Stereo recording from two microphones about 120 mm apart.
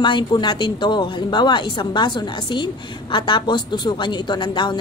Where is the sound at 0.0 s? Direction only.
40° left (ahead or behind).